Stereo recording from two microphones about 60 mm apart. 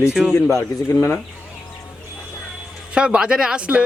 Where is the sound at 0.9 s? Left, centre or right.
Left.